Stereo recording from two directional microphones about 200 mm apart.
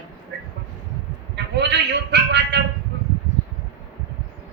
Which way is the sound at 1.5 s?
60° right (ahead or behind).